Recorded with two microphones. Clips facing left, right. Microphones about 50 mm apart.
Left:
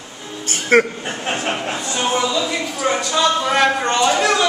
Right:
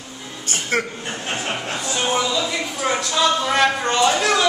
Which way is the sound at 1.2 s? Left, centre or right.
Centre.